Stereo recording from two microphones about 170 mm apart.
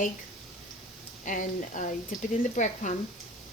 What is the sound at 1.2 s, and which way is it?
Speech, 50° left (ahead or behind).